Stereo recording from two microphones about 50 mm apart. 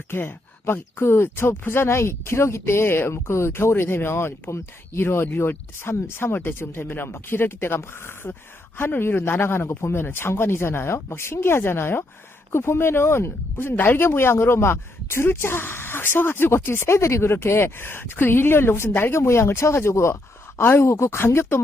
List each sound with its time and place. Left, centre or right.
0.1 s speech: left
19.2 s speech: left
20.6 s speech: left